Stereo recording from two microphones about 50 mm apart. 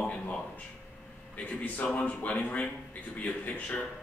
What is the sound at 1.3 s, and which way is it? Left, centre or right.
A man's voice, left.